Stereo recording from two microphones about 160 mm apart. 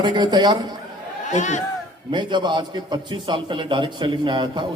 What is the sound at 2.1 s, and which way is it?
A man's voice, 30° right (ahead or behind).